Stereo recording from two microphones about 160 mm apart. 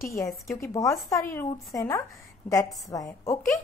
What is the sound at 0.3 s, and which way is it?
Speech, centre (ahead or behind).